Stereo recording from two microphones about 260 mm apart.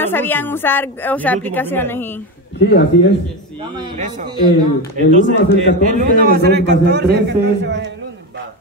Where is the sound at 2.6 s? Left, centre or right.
Left.